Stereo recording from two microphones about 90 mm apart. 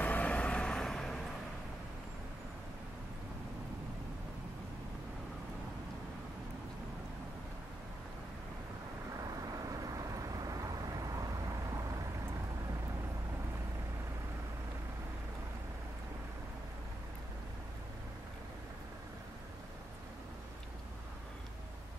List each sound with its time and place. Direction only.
0.0 s vehicle: 15° left (ahead or behind)
9.3 s vehicle: 40° right (ahead or behind)